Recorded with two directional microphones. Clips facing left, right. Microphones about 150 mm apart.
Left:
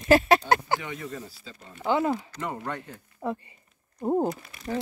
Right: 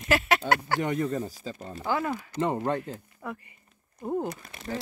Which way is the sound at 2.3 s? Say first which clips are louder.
Right 6 dB; 30° right (ahead or behind).